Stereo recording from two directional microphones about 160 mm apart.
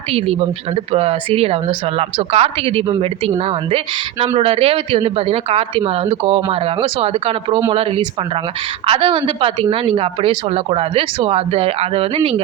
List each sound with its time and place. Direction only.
0.1 s speech: 35° right (ahead or behind)